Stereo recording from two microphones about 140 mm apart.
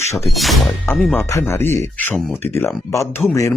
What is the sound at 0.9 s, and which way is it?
Speech, 15° left (ahead or behind).